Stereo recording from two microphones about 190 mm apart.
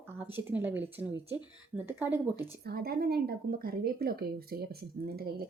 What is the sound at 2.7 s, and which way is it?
Speech, 55° right (ahead or behind).